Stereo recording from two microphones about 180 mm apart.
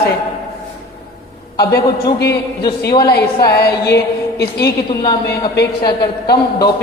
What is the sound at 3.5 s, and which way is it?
Music, 60° left (ahead or behind).